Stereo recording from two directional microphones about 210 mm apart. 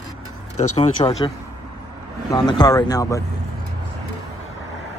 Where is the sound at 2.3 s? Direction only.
20° left (ahead or behind).